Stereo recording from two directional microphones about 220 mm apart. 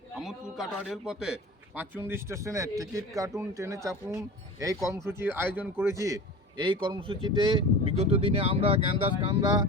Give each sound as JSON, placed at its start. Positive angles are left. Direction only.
{"t": 0.2, "sound": "a man's voice", "side_deg": 0}